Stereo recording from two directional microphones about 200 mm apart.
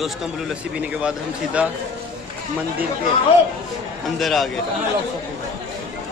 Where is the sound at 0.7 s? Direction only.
5° right (ahead or behind).